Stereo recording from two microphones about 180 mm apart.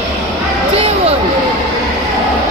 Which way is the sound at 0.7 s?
35° right (ahead or behind).